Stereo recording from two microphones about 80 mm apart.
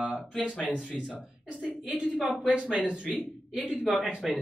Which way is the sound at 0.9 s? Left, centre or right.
Centre.